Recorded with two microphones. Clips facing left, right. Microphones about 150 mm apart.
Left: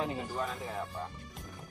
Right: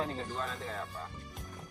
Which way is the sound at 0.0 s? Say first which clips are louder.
Left 2 dB; 10° left (ahead or behind).